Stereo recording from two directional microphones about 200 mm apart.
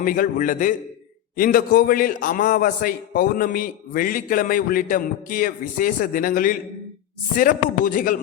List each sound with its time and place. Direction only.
0.0 s a man's voice: 45° left (ahead or behind)